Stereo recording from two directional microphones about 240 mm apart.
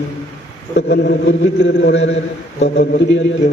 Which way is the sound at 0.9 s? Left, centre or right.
Left.